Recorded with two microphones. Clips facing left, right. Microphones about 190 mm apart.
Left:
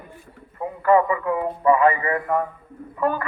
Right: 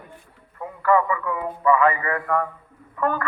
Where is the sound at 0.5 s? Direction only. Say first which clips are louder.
Left 2 dB; 20° left (ahead or behind).